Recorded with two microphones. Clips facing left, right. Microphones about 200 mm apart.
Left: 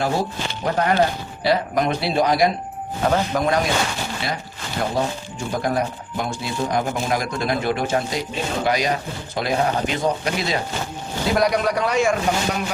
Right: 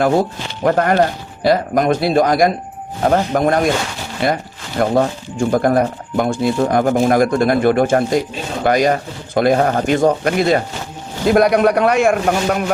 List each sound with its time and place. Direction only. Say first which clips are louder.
0.0 s a man's voice: right 7 dB; 55° right (ahead or behind)